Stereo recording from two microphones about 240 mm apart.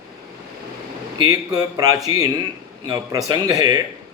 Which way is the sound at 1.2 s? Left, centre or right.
Centre.